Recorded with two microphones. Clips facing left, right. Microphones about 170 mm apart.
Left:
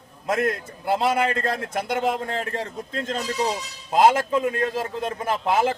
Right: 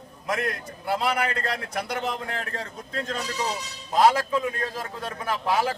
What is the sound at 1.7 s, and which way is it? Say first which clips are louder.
Speech: left 7 dB; 25° left (ahead or behind).